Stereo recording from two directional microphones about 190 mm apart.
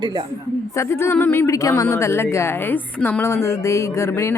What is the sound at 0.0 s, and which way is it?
Speech, 25° right (ahead or behind).